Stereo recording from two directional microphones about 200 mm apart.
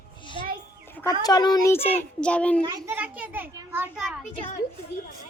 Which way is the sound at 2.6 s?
15° right (ahead or behind).